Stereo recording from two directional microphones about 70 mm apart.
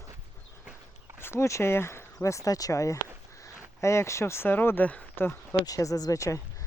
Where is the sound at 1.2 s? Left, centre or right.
Left.